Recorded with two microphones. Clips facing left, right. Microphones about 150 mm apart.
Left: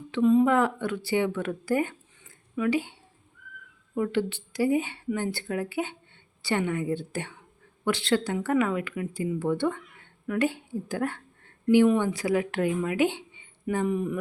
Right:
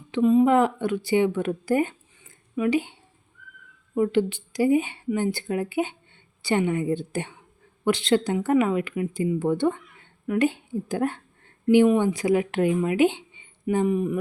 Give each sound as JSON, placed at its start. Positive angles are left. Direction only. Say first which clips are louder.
{"t": 0.1, "sound": "speech", "louder": "right 3 dB", "side_deg": -10}